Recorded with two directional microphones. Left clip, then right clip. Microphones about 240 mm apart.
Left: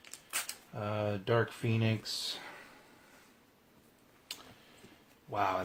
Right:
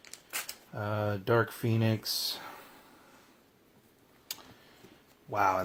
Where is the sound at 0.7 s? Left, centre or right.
Right.